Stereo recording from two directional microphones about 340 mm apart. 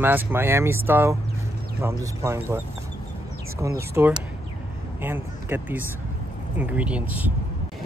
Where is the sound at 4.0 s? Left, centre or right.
Centre.